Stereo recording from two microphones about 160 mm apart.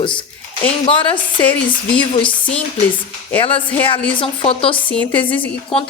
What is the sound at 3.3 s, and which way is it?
A woman's voice, 35° left (ahead or behind).